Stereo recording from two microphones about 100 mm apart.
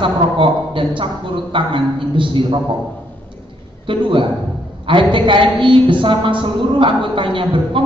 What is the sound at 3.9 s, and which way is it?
A man's voice, 55° right (ahead or behind).